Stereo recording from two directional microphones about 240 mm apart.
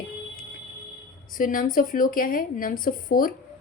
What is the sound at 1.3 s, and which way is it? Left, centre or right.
Speech, left.